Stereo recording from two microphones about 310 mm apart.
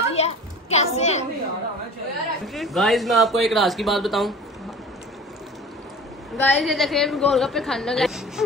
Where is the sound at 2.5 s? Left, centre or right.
Centre.